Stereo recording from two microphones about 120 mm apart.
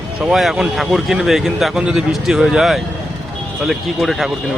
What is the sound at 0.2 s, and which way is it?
Speech, 5° right (ahead or behind).